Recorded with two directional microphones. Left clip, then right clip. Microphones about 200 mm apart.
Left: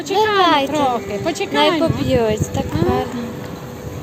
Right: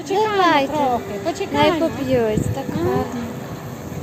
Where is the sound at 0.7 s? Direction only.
50° left (ahead or behind).